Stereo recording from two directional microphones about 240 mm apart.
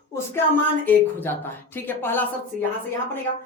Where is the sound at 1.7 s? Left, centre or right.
Centre.